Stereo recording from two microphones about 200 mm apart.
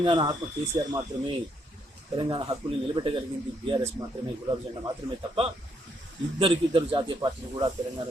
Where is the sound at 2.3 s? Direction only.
25° right (ahead or behind).